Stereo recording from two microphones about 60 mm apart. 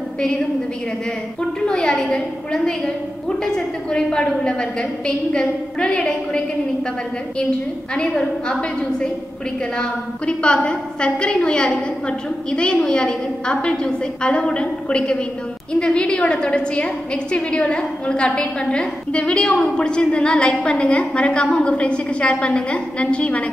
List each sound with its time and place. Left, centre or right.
1.6 s a woman's voice: centre
7.9 s a woman's voice: centre